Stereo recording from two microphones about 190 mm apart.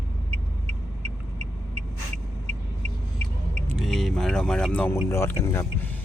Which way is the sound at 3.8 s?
Centre (ahead or behind).